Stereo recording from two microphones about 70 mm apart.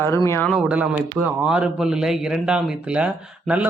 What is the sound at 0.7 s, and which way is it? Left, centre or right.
Speech, right.